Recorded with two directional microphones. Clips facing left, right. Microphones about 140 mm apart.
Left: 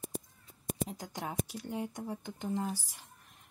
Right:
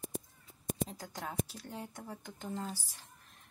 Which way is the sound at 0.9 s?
15° left (ahead or behind).